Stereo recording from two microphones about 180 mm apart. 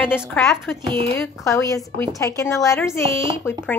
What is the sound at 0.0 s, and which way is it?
Speech, 5° right (ahead or behind).